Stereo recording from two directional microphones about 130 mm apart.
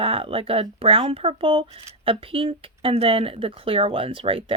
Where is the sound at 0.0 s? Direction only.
45° right (ahead or behind).